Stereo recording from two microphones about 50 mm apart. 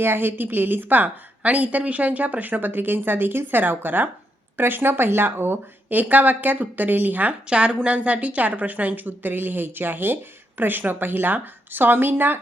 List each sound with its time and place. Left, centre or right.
0.0 s a woman's voice: right
6.0 s a woman's voice: right
7.4 s a woman's voice: centre; by 12.4 s right